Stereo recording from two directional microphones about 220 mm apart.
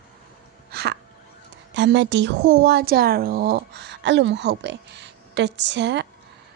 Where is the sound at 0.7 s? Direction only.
45° right (ahead or behind).